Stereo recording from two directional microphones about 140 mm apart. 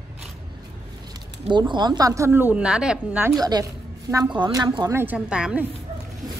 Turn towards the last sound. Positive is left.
turn(degrees=-10)  # may be behind; listen again after turning